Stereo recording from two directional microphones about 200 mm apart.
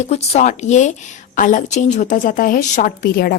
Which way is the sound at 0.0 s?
35° left (ahead or behind).